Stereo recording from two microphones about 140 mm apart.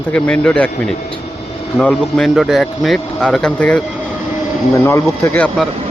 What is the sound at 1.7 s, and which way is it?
Speech, 5° left (ahead or behind).